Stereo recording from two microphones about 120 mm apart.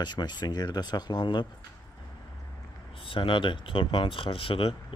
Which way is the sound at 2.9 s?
50° left (ahead or behind).